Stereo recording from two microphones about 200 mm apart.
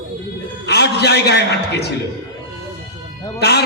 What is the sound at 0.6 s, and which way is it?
A man's voice, 55° left (ahead or behind).